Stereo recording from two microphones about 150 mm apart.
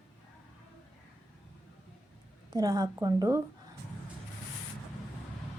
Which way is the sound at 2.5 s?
25° right (ahead or behind).